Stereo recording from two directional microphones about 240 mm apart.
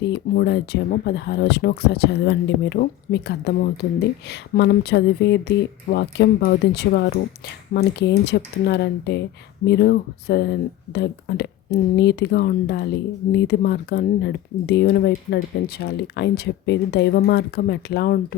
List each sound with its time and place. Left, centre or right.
0.0 s speech: left